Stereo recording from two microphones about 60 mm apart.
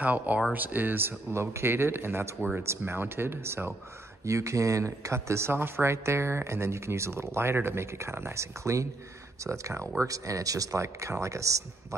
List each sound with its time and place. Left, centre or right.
0.0 s speech: right
4.2 s speech: right